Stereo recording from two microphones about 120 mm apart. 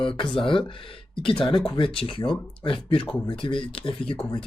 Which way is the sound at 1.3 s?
5° left (ahead or behind).